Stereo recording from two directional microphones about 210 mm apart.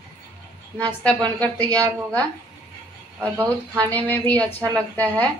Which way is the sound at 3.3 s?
10° right (ahead or behind).